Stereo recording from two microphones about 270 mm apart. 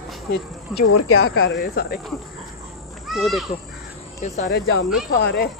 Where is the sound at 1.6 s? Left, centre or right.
Left.